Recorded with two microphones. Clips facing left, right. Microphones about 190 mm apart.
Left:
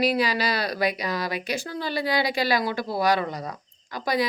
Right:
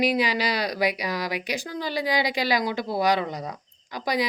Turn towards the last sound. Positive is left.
turn(degrees=-15)  # may be behind; listen again after turning